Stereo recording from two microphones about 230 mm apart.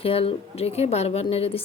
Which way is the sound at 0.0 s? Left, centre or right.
Left.